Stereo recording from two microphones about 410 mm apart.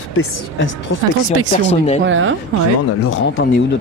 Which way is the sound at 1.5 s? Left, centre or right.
Centre.